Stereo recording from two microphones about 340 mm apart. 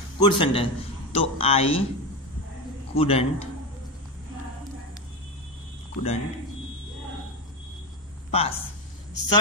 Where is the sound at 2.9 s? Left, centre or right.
Centre.